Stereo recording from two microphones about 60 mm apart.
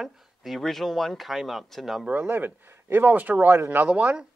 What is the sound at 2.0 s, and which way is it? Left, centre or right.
Speech, right.